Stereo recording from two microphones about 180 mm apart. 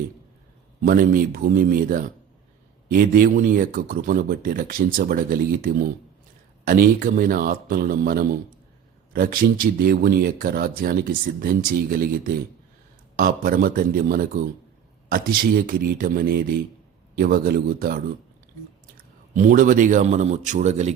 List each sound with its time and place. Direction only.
0.8 s a man's voice: 50° right (ahead or behind)